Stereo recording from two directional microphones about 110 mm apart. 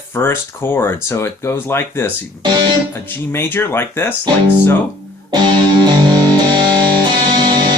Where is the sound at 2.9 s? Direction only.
20° left (ahead or behind).